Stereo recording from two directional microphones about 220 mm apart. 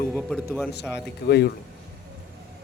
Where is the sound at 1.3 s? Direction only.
45° left (ahead or behind).